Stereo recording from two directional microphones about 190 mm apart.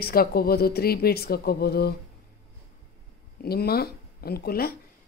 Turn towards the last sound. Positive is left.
turn(degrees=55)  # may be behind; listen again after turning